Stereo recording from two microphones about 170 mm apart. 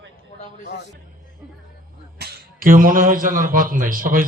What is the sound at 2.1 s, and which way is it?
A man's voice, 55° right (ahead or behind).